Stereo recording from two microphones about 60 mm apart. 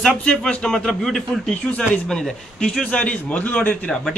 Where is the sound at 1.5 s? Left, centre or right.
Centre.